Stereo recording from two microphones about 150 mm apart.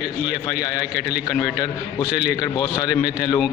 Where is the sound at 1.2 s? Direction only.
30° left (ahead or behind).